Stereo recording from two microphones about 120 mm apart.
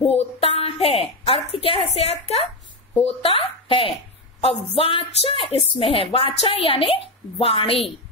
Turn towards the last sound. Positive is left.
turn(degrees=50)  # may be behind; listen again after turning